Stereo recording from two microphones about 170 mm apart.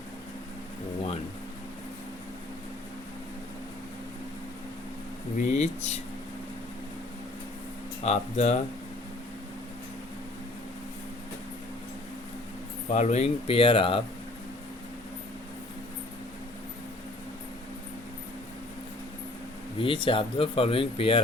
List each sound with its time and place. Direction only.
5.4 s speech: 45° left (ahead or behind)
8.0 s speech: 40° left (ahead or behind)
12.9 s speech: 45° left (ahead or behind)
19.8 s speech: 30° left (ahead or behind)